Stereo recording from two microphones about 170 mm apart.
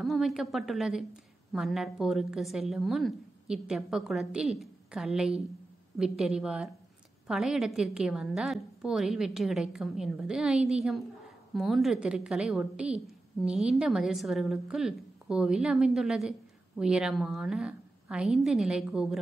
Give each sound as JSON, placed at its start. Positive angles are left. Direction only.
{"t": 0.0, "sound": "a woman's voice", "side_deg": 0}